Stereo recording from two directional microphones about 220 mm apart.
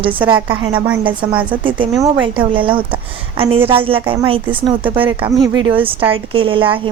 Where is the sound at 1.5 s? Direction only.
20° right (ahead or behind).